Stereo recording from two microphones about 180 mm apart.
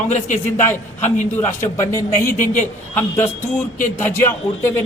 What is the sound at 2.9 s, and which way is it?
Speech, 10° left (ahead or behind).